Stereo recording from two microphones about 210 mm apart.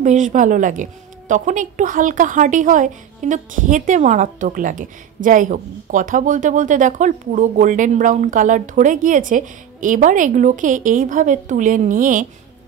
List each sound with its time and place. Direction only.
0.0 s speech: 35° right (ahead or behind)